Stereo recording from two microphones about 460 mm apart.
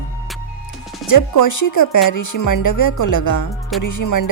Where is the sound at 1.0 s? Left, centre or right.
Left.